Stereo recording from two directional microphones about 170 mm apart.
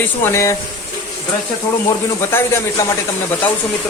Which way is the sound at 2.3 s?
15° left (ahead or behind).